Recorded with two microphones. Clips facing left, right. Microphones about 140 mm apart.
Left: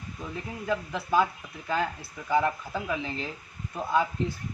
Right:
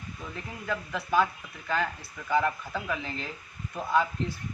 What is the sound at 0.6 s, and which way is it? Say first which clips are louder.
Speech: left 3 dB; 25° left (ahead or behind).